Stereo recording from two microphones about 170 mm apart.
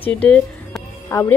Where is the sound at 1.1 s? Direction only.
20° left (ahead or behind).